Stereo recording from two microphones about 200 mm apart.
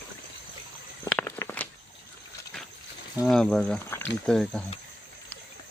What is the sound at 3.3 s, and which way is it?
Speech, 5° left (ahead or behind).